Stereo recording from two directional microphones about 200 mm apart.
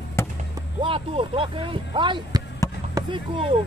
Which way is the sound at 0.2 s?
15° left (ahead or behind).